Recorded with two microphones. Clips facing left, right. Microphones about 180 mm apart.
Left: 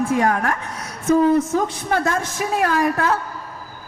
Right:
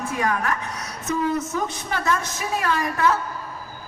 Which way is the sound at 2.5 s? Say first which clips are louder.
Left 5 dB; 50° left (ahead or behind).